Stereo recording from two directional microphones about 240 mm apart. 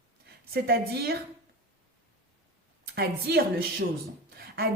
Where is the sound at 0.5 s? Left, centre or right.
Right.